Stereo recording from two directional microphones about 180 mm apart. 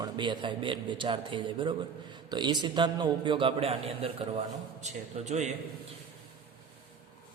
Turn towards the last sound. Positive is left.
turn(degrees=-40)  # may be behind; listen again after turning